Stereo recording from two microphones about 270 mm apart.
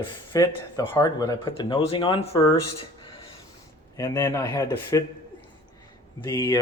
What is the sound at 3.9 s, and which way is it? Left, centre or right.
Speech, centre.